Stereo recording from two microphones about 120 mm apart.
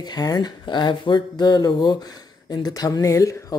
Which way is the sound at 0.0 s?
35° left (ahead or behind).